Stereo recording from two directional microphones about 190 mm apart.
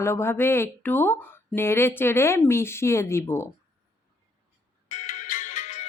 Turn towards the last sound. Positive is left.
turn(degrees=35)  # may be behind; listen again after turning